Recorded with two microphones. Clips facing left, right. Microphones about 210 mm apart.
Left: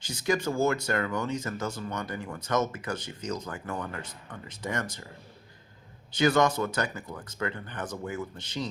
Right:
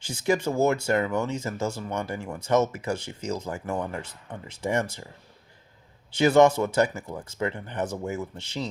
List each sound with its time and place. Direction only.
0.1 s speech: 25° right (ahead or behind)
6.1 s speech: 25° right (ahead or behind)